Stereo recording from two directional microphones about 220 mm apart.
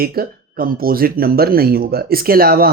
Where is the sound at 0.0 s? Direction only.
45° right (ahead or behind).